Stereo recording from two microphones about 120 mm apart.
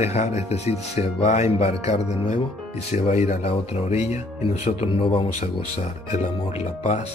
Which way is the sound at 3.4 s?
60° left (ahead or behind).